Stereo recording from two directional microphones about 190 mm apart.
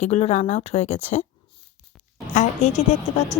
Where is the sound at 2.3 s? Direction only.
40° left (ahead or behind).